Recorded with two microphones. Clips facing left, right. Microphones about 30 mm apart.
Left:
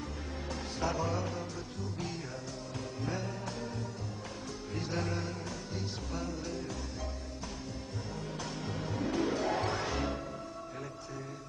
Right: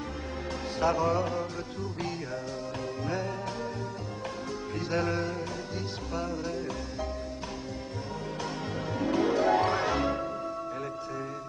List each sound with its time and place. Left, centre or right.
0.7 s music: right
4.7 s music: right
8.7 s music: right